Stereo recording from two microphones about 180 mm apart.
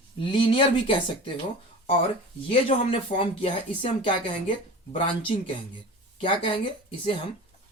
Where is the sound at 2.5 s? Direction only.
30° left (ahead or behind).